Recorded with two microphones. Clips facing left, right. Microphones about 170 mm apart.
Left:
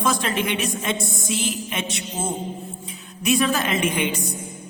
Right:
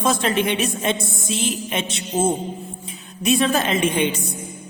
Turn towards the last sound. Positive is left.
turn(degrees=-25)  # may be behind; listen again after turning